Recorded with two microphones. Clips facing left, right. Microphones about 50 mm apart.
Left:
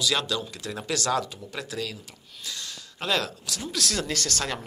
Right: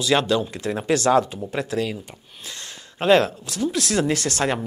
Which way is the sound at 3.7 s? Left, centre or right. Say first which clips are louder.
Right 6 dB; right.